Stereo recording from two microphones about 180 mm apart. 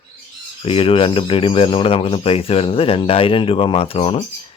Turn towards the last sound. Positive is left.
turn(degrees=30)  # may be behind; listen again after turning